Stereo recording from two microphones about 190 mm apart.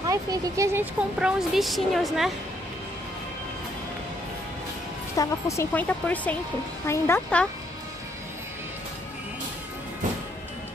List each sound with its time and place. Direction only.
0.0 s speech: 20° right (ahead or behind)
1.2 s a woman's voice: centre (ahead or behind)
5.1 s speech: 15° left (ahead or behind)